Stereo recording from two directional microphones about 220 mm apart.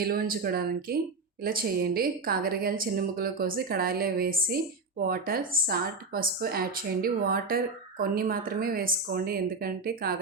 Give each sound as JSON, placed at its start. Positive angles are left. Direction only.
{"t": 0.1, "sound": "a woman's voice", "side_deg": -40}